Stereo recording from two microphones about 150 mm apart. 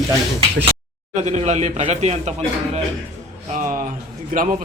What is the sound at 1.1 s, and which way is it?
Speech, 45° right (ahead or behind).